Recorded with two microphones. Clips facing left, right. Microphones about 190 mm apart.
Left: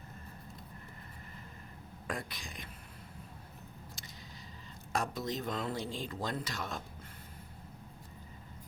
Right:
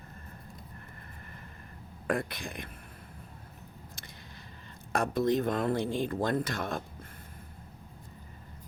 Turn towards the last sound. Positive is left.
turn(degrees=-55)  # may be behind; listen again after turning